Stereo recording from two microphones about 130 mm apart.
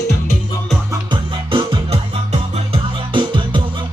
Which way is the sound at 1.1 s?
40° right (ahead or behind).